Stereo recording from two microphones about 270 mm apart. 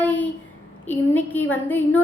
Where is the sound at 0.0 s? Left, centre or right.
Centre.